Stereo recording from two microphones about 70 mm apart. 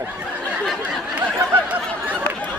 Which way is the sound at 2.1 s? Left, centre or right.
Centre.